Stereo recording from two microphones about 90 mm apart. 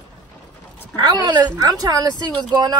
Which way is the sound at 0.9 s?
50° right (ahead or behind).